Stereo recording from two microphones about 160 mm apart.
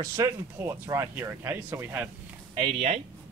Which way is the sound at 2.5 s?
35° right (ahead or behind).